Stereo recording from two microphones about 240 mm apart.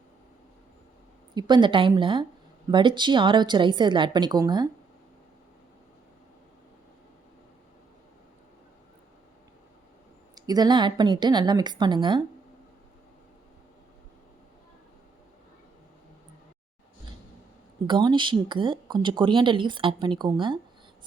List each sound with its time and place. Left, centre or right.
1.4 s speech: centre
10.3 s a woman's voice: centre
17.8 s speech: centre